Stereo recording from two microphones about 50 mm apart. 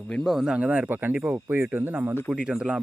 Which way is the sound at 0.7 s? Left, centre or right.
Right.